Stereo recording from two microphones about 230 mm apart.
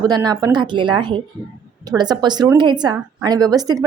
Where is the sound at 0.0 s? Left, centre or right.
Centre.